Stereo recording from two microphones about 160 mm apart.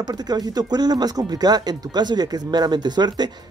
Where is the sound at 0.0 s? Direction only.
25° right (ahead or behind).